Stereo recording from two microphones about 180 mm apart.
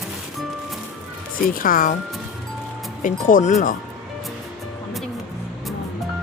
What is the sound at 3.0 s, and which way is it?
Speech, 45° left (ahead or behind).